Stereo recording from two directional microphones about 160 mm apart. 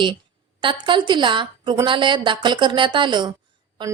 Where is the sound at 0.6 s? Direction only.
30° right (ahead or behind).